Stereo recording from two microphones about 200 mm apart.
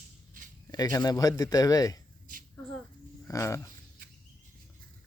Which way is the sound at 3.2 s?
15° left (ahead or behind).